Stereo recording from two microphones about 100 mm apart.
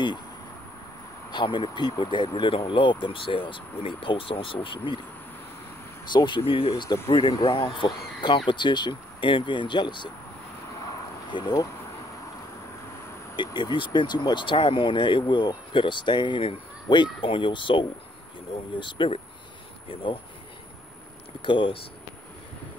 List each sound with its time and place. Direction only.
1.3 s speech: 50° left (ahead or behind)
6.1 s speech: 50° left (ahead or behind)
10.9 s a sound: 40° left (ahead or behind)
13.4 s speech: 50° left (ahead or behind)
21.4 s speech: 60° left (ahead or behind)